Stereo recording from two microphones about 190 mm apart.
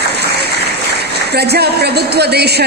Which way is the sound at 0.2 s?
60° right (ahead or behind).